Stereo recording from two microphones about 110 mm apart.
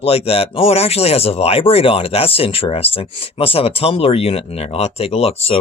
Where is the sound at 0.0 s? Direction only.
65° left (ahead or behind).